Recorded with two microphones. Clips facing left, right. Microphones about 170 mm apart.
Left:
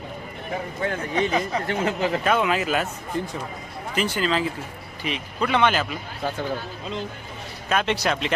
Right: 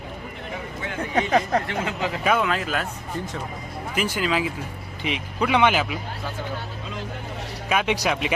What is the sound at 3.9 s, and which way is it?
Speech, 10° right (ahead or behind).